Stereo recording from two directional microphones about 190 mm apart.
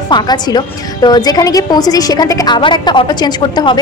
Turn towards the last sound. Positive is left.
turn(degrees=20)  # may be behind; listen again after turning